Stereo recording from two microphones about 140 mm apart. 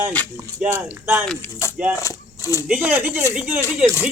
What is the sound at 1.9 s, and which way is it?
Speech, 25° left (ahead or behind).